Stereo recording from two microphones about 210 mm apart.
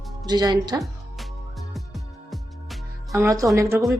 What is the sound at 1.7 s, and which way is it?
Music, centre (ahead or behind).